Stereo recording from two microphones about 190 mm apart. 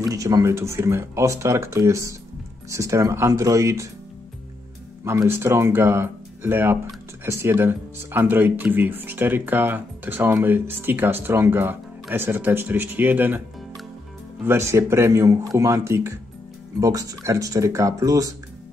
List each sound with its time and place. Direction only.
0.0 s speech: 15° right (ahead or behind)
5.0 s speech: 15° right (ahead or behind)